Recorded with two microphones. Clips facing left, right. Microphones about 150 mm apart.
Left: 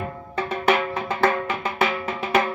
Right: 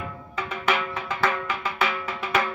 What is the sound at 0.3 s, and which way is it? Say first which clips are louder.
Music: left 5 dB; 35° left (ahead or behind).